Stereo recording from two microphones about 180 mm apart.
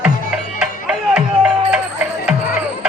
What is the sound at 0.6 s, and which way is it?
Music, 5° right (ahead or behind).